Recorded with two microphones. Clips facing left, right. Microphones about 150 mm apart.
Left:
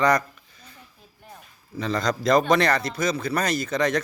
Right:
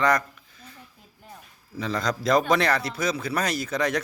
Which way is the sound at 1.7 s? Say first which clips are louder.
Left 2 dB; 5° right (ahead or behind).